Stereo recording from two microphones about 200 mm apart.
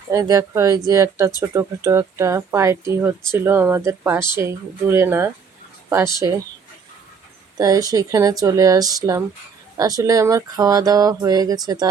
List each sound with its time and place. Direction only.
0.1 s speech: 15° right (ahead or behind)
7.6 s speech: 15° right (ahead or behind)